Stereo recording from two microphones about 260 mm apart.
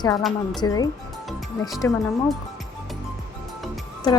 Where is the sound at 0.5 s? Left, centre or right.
Centre.